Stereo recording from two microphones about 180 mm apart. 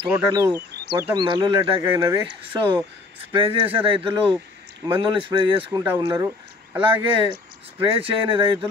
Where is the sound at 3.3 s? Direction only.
30° right (ahead or behind).